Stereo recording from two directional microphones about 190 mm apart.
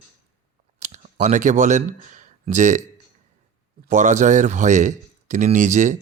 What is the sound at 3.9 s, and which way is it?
Speech, 40° right (ahead or behind).